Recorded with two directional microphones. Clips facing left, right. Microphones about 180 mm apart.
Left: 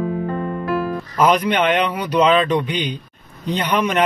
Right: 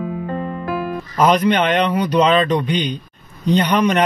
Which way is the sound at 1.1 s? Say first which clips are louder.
Right 2 dB; 5° left (ahead or behind).